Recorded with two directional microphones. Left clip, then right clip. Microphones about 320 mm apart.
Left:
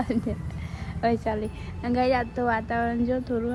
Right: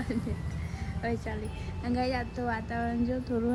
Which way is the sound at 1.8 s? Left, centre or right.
Centre.